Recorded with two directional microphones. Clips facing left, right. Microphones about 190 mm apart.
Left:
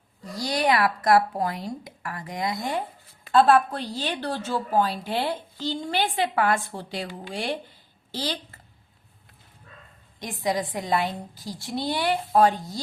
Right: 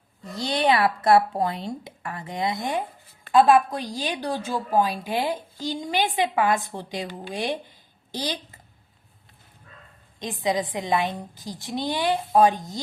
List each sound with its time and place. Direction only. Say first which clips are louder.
0.3 s a woman's voice: right 1 dB; 25° right (ahead or behind)
10.2 s a woman's voice: right 1 dB; 20° right (ahead or behind)